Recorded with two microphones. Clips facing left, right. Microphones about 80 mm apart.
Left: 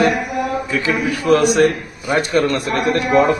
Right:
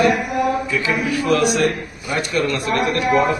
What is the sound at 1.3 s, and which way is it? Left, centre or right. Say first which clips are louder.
A man's voice: left 5 dB; left.